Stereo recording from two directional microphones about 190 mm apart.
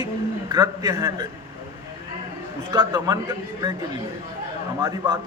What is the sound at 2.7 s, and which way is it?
Speech, 20° right (ahead or behind).